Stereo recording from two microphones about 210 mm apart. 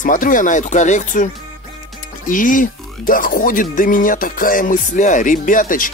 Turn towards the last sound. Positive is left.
turn(degrees=40)  # may be behind; listen again after turning